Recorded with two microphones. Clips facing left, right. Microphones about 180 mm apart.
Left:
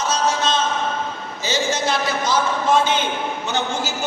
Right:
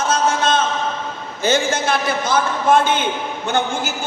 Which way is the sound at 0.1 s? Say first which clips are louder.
Right 3 dB; 55° right (ahead or behind).